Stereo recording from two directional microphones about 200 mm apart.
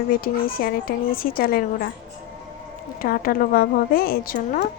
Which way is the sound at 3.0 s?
45° left (ahead or behind).